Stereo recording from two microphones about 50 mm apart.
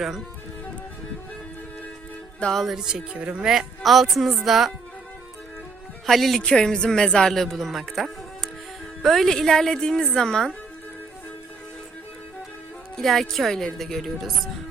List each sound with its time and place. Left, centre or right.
2.6 s speech: centre
3.1 s speech: right
3.4 s speech: centre
6.1 s speech: centre
6.4 s speech: centre
13.0 s speech: centre